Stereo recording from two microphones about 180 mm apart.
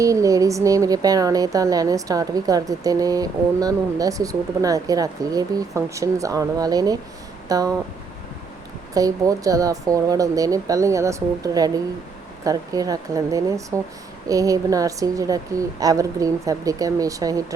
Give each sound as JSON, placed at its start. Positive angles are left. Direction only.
{"t": 0.0, "sound": "speech", "side_deg": -20}
{"t": 9.0, "sound": "speech", "side_deg": -20}